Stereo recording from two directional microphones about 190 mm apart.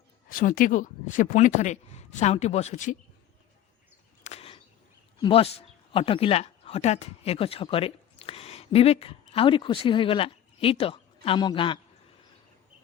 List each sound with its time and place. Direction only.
0.3 s speech: 45° left (ahead or behind)
4.2 s a sound: 35° left (ahead or behind)
5.2 s speech: 30° left (ahead or behind)